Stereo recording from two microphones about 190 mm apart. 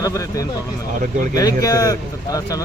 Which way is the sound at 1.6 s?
20° left (ahead or behind).